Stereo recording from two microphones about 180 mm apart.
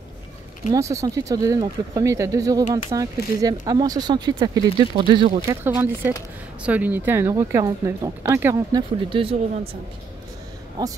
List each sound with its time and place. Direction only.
0.7 s speech: 15° right (ahead or behind)
5.5 s speech: 15° right (ahead or behind); by 9.4 s 30° right (ahead or behind)
10.8 s speech: 20° right (ahead or behind)